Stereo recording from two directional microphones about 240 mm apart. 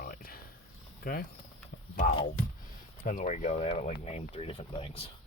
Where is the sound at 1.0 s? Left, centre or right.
Left.